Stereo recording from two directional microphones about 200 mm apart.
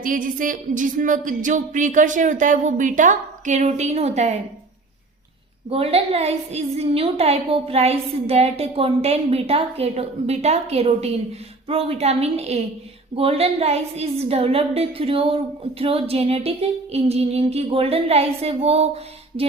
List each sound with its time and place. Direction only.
0.0 s a woman's voice: 40° right (ahead or behind)
5.7 s a woman's voice: 30° right (ahead or behind)